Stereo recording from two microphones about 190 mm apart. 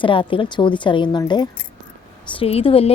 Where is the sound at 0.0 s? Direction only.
25° left (ahead or behind).